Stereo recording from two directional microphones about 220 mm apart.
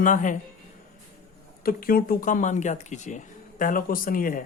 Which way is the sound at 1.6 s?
40° left (ahead or behind).